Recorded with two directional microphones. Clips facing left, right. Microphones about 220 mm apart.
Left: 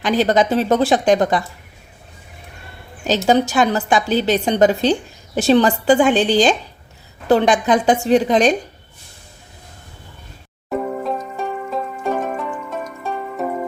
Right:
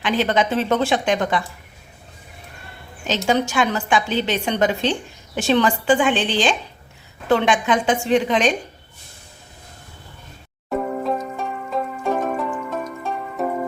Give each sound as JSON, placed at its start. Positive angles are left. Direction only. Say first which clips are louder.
{"t": 0.0, "sound": "a woman's voice", "louder": "left 4 dB", "side_deg": 40}
{"t": 3.2, "sound": "a woman's voice", "louder": "left 4 dB", "side_deg": 35}
{"t": 10.7, "sound": "music", "louder": "even", "side_deg": 0}